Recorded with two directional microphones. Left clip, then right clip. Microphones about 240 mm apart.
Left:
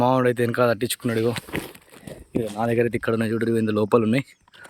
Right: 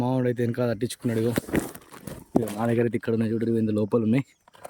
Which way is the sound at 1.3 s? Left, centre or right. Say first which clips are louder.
Right 3 dB; right.